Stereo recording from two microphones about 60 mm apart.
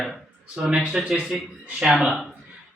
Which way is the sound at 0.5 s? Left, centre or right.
Centre.